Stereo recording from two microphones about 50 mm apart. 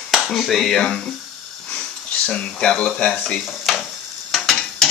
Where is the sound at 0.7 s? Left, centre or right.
Centre.